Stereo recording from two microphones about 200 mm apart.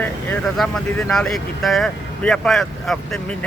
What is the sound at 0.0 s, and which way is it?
Speech, 5° left (ahead or behind).